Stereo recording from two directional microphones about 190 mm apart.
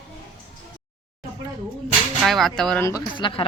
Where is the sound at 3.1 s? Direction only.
25° left (ahead or behind).